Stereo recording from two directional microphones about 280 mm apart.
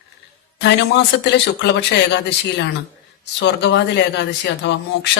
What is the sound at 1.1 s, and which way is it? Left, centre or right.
Speech, left.